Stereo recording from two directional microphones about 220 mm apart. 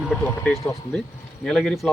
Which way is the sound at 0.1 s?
5° left (ahead or behind).